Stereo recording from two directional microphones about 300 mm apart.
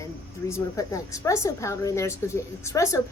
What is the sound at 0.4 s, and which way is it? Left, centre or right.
A woman's voice, centre.